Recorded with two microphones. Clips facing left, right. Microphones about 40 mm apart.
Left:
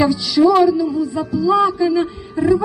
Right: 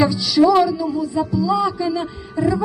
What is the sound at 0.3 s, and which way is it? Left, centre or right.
Speech, centre.